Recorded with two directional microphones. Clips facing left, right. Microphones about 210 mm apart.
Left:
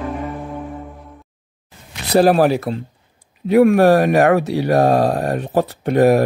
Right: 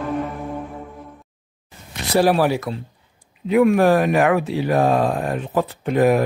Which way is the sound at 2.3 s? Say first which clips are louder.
Left 4 dB; 40° left (ahead or behind).